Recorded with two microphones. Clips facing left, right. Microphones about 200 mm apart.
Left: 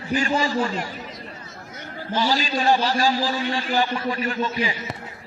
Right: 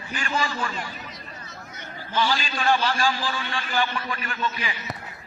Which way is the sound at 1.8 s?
40° left (ahead or behind).